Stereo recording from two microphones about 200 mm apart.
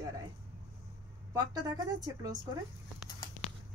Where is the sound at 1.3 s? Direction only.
20° right (ahead or behind).